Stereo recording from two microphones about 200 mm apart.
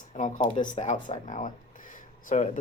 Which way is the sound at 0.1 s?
40° left (ahead or behind).